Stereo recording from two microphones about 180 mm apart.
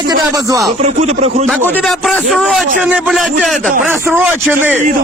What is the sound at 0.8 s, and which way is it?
Speech, 40° right (ahead or behind).